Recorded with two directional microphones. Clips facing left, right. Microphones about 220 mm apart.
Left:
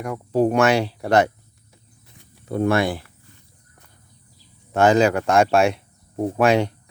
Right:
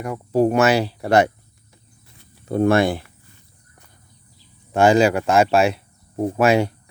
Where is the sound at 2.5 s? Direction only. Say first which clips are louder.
Right 3 dB; 30° right (ahead or behind).